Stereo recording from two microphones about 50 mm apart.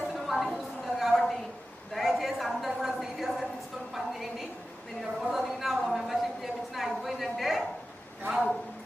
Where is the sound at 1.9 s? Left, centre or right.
Centre.